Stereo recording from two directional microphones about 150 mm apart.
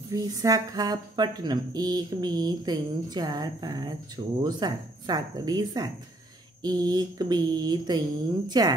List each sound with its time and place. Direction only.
0.1 s speech: 25° right (ahead or behind)